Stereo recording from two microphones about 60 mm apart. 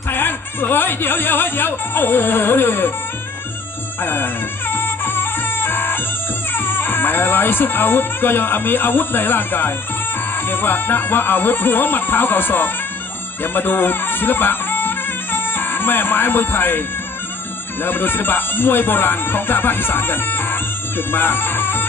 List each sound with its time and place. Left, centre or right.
0.1 s speech: left
4.0 s music: left
6.5 s speech: left
17.8 s speech: left